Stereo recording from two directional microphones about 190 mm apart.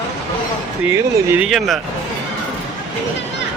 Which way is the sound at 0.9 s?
5° right (ahead or behind).